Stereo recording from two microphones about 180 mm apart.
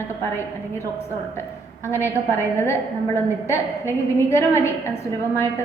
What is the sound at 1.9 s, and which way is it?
A woman's voice, 15° left (ahead or behind).